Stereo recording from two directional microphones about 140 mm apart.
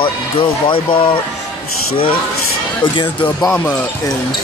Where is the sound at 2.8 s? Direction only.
35° left (ahead or behind).